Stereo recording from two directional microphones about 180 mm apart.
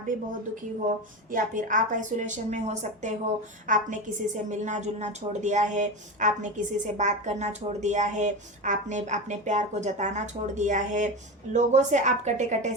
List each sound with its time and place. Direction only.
1.3 s a woman's voice: 45° right (ahead or behind)